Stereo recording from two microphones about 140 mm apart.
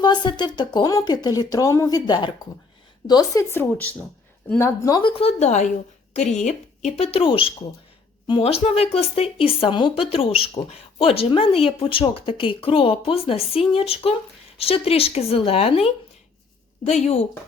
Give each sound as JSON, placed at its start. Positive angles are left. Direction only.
{"t": 0.0, "sound": "speech", "side_deg": 35}
{"t": 4.9, "sound": "speech", "side_deg": 40}